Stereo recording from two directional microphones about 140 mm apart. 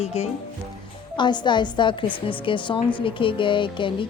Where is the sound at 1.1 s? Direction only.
35° left (ahead or behind).